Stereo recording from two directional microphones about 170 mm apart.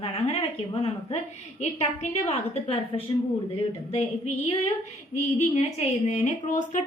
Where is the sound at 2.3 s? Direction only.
35° left (ahead or behind).